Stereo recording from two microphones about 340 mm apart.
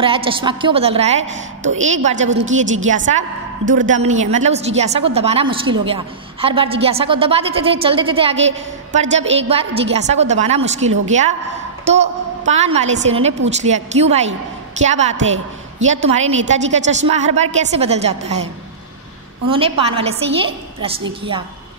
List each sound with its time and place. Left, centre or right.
0.0 s a woman's voice: centre
3.8 s a woman's voice: right
19.5 s a woman's voice: centre